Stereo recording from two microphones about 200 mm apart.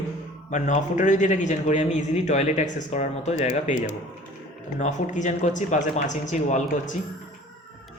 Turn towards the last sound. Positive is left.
turn(degrees=40)  # may be behind; listen again after turning